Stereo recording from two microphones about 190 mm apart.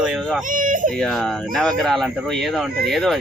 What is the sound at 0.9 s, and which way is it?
Speech, centre (ahead or behind).